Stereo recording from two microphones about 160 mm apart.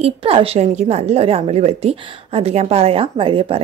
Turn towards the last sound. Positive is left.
turn(degrees=-35)  # may be behind; listen again after turning